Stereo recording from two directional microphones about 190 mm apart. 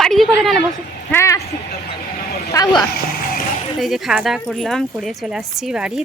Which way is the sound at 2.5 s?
20° left (ahead or behind).